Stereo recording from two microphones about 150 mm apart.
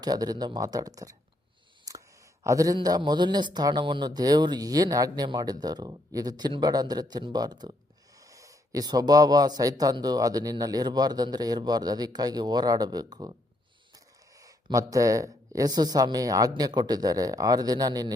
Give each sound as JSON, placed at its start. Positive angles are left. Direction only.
{"t": 0.0, "sound": "speech", "side_deg": -25}
{"t": 1.9, "sound": "a sound", "side_deg": -20}
{"t": 2.4, "sound": "a man's voice", "side_deg": -20}
{"t": 14.3, "sound": "speech", "side_deg": -20}